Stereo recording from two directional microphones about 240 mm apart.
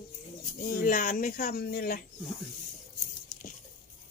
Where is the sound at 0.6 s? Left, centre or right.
Left.